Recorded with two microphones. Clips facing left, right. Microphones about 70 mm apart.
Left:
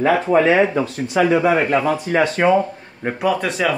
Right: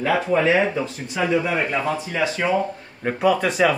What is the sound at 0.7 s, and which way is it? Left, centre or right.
Speech, left.